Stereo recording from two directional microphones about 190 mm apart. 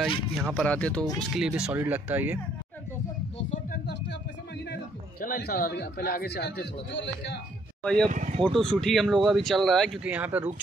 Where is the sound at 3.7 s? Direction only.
60° left (ahead or behind).